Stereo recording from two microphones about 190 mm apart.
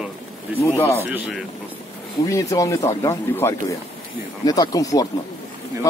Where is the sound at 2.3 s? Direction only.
15° left (ahead or behind).